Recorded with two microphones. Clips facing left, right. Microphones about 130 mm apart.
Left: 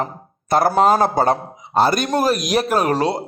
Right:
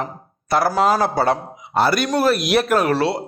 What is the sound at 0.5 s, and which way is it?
Speech, 50° left (ahead or behind).